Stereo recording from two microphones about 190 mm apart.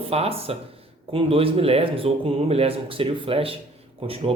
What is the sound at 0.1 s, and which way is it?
Speech, 30° right (ahead or behind).